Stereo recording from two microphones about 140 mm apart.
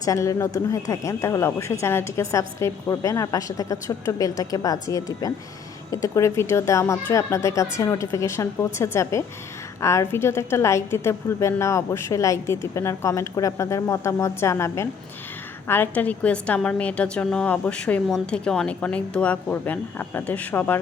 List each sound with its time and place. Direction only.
0.0 s a woman's voice: 25° left (ahead or behind)